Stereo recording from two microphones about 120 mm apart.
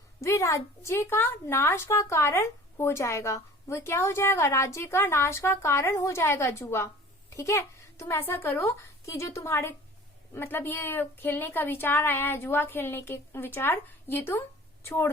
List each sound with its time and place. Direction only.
0.2 s a woman's voice: 25° left (ahead or behind)